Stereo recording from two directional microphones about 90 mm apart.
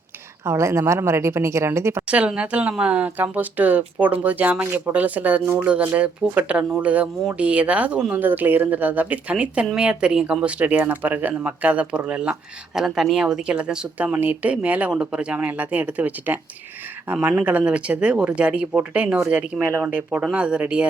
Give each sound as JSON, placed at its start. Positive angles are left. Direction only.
{"t": 0.4, "sound": "a woman's voice", "side_deg": -30}
{"t": 2.0, "sound": "speech", "side_deg": -15}